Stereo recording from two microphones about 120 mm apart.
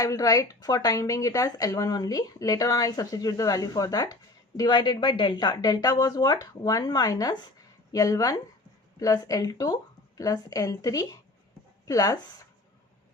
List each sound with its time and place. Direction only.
0.0 s speech: 30° left (ahead or behind)